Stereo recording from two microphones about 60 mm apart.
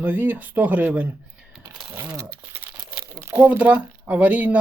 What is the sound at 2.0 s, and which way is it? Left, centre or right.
Speech, right.